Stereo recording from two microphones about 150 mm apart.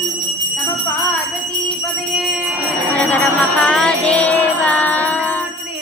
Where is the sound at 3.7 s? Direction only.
5° left (ahead or behind).